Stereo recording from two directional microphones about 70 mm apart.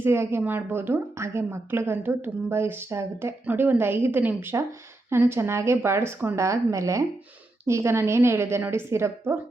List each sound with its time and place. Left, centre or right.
0.0 s a woman's voice: right
3.4 s a woman's voice: right